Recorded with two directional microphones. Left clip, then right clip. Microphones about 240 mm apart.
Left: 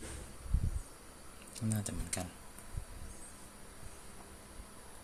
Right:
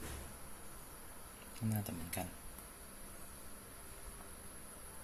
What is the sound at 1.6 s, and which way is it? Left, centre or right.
Speech, centre.